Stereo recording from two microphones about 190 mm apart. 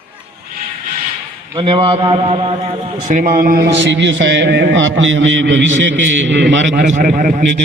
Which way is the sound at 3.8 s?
70° right (ahead or behind).